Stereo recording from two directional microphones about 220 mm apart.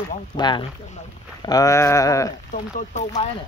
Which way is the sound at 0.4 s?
20° left (ahead or behind).